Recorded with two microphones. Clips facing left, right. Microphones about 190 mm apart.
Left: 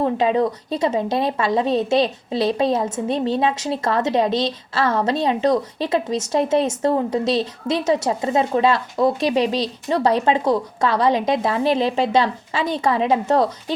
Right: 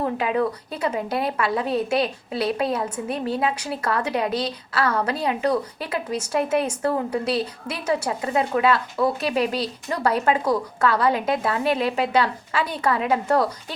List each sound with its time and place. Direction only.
0.0 s a woman's voice: 25° left (ahead or behind)